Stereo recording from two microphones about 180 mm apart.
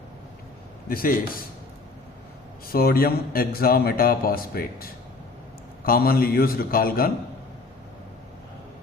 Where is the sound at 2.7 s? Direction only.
55° left (ahead or behind).